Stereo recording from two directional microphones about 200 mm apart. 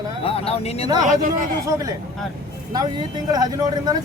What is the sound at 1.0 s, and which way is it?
Speech, 40° right (ahead or behind).